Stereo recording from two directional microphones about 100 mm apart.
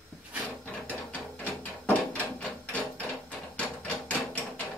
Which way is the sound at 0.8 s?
15° left (ahead or behind).